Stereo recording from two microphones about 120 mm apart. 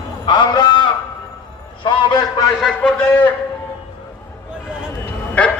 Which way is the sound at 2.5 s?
5° left (ahead or behind).